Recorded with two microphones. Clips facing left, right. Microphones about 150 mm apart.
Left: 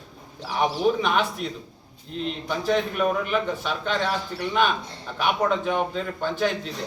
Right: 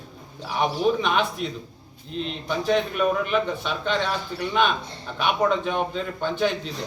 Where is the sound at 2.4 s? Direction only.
Centre (ahead or behind).